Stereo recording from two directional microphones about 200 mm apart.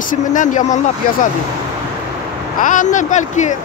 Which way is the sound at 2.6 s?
40° left (ahead or behind).